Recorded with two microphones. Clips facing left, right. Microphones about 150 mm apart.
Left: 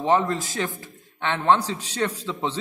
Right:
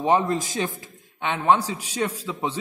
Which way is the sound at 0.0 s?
15° right (ahead or behind).